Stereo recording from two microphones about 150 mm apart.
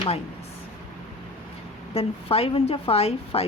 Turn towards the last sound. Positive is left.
turn(degrees=45)  # may be behind; listen again after turning